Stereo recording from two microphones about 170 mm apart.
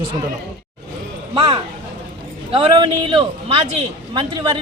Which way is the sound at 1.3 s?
30° right (ahead or behind).